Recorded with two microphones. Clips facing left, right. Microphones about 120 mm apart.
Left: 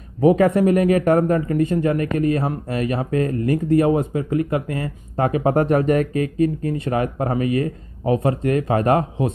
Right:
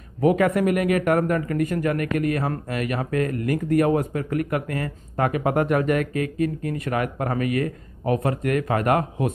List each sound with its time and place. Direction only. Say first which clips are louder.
0.2 s speech: left 4 dB; 30° left (ahead or behind)